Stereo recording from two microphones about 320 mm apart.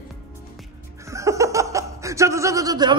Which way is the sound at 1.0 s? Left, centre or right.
Centre.